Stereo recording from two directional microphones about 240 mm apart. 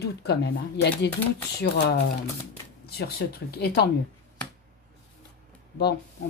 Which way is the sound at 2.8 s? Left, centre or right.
Left.